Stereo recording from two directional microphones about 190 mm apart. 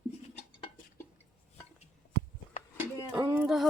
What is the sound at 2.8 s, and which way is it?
Speech, 10° right (ahead or behind).